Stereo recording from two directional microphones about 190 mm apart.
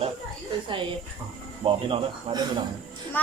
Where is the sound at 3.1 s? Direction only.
10° left (ahead or behind).